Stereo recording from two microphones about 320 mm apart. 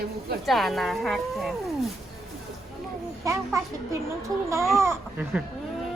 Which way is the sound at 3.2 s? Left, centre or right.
Centre.